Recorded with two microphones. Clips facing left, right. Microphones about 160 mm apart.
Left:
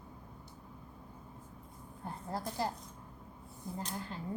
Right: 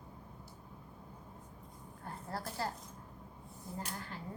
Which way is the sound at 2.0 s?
15° left (ahead or behind).